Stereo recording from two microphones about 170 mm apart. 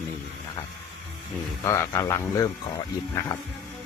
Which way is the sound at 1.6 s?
15° left (ahead or behind).